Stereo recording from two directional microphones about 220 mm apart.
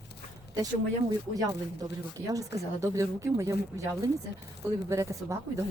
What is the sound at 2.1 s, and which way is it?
A woman's voice, 15° right (ahead or behind).